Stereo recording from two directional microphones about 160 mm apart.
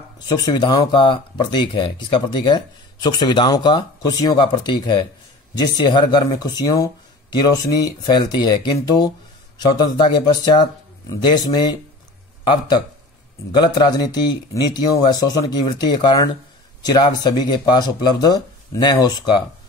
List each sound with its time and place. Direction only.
0.3 s speech: 25° left (ahead or behind)